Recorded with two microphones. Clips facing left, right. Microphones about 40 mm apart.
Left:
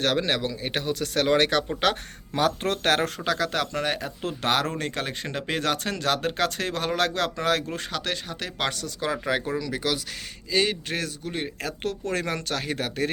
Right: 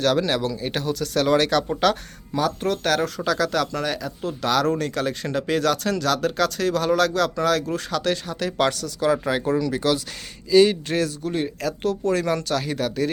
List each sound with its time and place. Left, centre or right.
0.0 s speech: left
2.3 s speech: left
3.2 s speech: left
9.1 s speech: centre; by 12.9 s left